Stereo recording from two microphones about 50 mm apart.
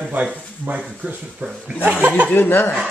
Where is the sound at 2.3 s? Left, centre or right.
Left.